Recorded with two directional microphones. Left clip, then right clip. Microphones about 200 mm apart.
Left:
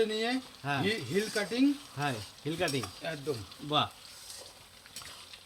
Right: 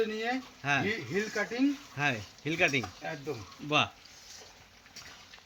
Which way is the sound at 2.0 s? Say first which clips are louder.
Right 3 dB; 10° right (ahead or behind).